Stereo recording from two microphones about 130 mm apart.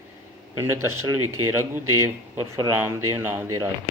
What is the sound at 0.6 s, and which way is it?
A man's voice, 20° right (ahead or behind).